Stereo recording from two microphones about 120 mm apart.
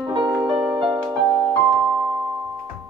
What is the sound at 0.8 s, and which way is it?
Music, 45° right (ahead or behind).